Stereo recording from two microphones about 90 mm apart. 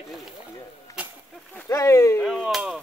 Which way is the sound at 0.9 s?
40° left (ahead or behind).